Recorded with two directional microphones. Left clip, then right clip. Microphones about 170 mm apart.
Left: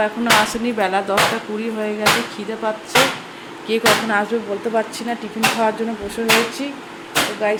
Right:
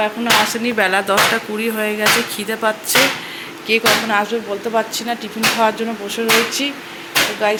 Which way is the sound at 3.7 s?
20° left (ahead or behind).